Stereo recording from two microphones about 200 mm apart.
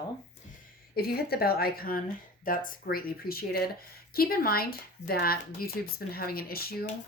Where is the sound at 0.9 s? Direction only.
50° left (ahead or behind).